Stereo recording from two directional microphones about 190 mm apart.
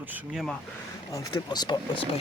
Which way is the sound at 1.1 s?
20° left (ahead or behind).